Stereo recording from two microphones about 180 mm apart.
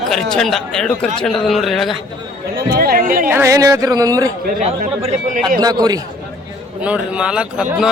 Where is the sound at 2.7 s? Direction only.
55° right (ahead or behind).